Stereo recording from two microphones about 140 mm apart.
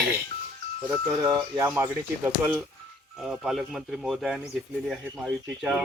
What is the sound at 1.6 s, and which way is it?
Speech, 15° right (ahead or behind).